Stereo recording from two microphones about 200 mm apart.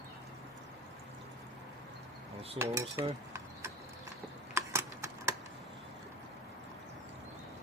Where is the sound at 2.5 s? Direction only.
15° right (ahead or behind).